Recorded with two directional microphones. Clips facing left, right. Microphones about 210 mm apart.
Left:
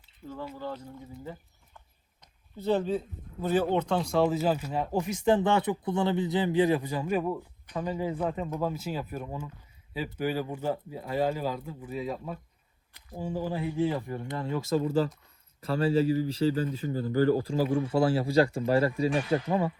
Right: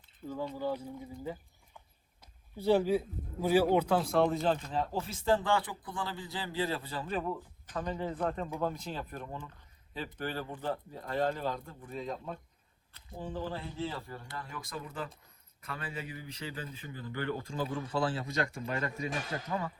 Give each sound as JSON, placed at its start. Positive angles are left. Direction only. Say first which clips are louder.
{"t": 0.5, "sound": "speech", "louder": "right 2 dB", "side_deg": -10}
{"t": 2.6, "sound": "a man's voice", "louder": "even", "side_deg": -10}